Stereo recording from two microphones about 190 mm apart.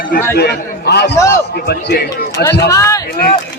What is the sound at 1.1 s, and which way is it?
Speech, 15° left (ahead or behind).